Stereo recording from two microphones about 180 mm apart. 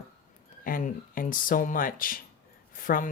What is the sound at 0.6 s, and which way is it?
Speech, 50° left (ahead or behind).